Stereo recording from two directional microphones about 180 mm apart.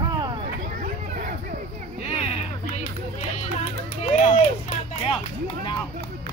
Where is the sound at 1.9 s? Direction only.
35° left (ahead or behind).